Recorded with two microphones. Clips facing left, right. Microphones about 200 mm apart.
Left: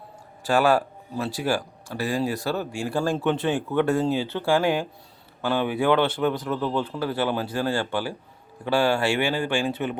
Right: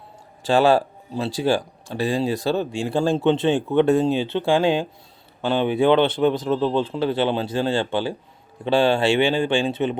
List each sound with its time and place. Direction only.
0.4 s speech: 25° right (ahead or behind)